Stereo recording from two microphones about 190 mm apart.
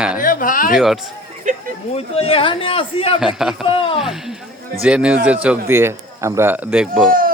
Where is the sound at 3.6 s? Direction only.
25° left (ahead or behind).